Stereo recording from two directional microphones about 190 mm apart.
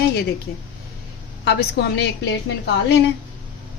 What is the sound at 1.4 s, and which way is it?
A woman's voice, 60° left (ahead or behind).